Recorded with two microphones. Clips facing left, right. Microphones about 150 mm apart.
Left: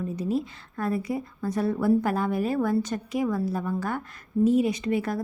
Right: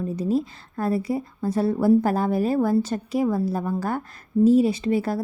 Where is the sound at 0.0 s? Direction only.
35° right (ahead or behind).